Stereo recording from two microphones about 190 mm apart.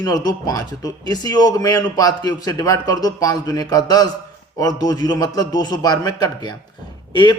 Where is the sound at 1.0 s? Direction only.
20° left (ahead or behind).